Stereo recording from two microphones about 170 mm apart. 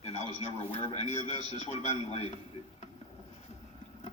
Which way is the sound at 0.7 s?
35° left (ahead or behind).